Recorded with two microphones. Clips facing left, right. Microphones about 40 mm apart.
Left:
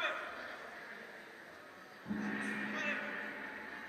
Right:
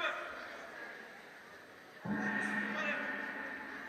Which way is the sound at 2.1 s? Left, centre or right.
Right.